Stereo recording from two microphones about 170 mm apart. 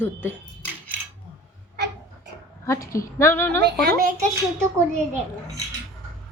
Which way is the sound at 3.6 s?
75° right (ahead or behind).